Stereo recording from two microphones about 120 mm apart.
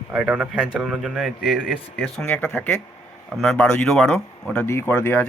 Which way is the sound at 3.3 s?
Centre (ahead or behind).